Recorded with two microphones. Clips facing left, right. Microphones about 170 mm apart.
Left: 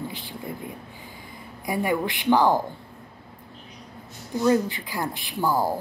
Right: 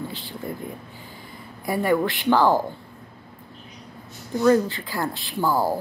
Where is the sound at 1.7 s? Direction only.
15° left (ahead or behind).